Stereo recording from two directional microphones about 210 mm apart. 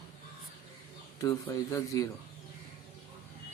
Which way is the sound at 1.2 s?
15° left (ahead or behind).